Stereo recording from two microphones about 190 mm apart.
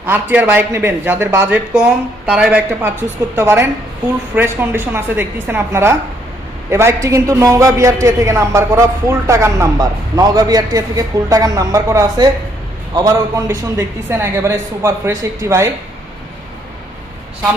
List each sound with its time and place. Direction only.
0.0 s a man's voice: 10° right (ahead or behind)